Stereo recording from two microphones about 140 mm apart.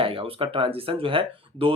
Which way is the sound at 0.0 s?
40° right (ahead or behind).